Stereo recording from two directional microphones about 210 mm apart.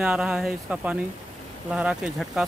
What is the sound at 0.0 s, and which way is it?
Speech, 5° right (ahead or behind).